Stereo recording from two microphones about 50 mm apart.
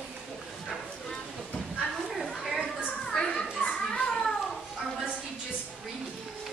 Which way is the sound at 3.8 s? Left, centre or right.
Centre.